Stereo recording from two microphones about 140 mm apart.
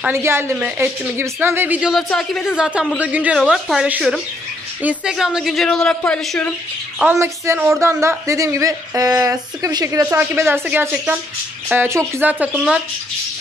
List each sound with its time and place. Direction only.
0.0 s a woman's voice: 20° right (ahead or behind); by 6.5 s 5° left (ahead or behind)
7.2 s a woman's voice: 20° right (ahead or behind)